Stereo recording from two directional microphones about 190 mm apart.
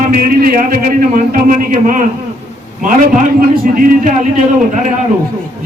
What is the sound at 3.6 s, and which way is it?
Speech, 45° right (ahead or behind).